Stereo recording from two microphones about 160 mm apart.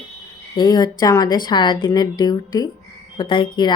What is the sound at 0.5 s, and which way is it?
Speech, 25° left (ahead or behind).